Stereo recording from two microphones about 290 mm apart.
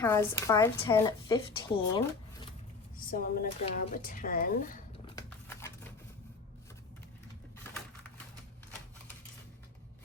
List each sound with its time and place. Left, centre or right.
0.0 s speech: centre
3.1 s speech: left